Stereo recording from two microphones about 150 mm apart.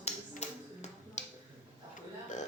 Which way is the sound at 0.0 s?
50° left (ahead or behind).